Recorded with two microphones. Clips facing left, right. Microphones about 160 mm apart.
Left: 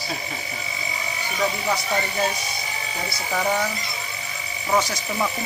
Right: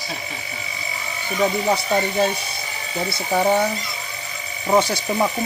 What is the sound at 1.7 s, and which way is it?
Speech, 30° right (ahead or behind).